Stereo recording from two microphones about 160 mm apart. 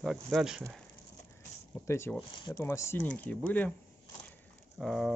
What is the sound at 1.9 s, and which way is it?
Speech, 15° left (ahead or behind).